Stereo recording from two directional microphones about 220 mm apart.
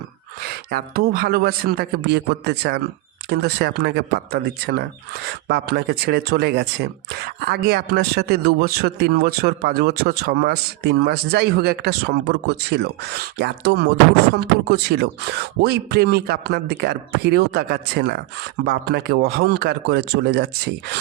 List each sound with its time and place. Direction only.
0.7 s speech: 40° right (ahead or behind)